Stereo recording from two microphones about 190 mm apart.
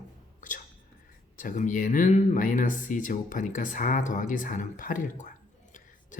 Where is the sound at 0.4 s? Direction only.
45° left (ahead or behind).